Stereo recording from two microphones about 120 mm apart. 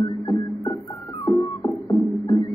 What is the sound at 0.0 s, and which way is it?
Music, 35° left (ahead or behind).